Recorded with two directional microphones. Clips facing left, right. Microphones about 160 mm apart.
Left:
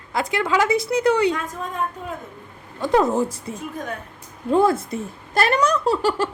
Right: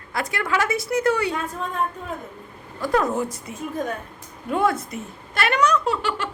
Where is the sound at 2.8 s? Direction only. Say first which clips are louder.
Left 3 dB; 25° left (ahead or behind).